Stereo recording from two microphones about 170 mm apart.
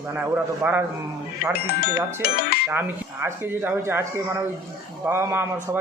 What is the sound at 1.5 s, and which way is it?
Speech, 65° left (ahead or behind).